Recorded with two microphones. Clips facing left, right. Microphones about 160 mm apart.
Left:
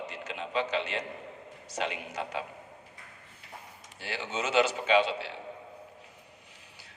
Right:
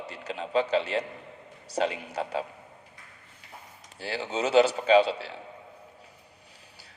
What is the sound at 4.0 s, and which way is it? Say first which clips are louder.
A man's voice: right 5 dB; 35° right (ahead or behind).